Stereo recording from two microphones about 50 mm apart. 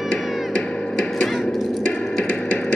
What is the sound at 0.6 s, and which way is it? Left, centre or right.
Music, centre.